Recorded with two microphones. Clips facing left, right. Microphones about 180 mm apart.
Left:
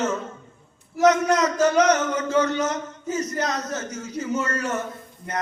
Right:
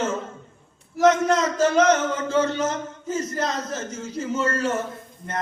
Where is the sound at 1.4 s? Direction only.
25° right (ahead or behind).